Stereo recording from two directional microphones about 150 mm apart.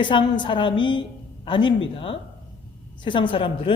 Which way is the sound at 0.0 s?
35° left (ahead or behind).